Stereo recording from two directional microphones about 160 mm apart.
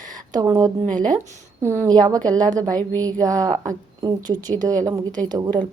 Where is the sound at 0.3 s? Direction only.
25° right (ahead or behind).